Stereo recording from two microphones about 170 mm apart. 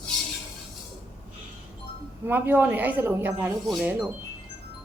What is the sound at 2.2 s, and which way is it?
Speech, 10° right (ahead or behind).